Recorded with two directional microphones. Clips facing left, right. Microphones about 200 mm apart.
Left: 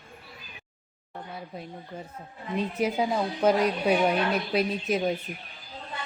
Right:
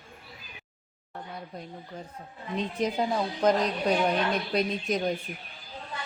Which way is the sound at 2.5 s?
10° left (ahead or behind).